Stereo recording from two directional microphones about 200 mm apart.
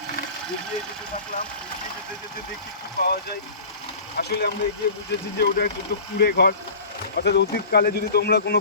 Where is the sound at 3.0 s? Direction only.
50° left (ahead or behind).